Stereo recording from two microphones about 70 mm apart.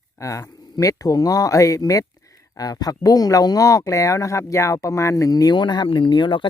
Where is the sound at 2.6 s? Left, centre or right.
Left.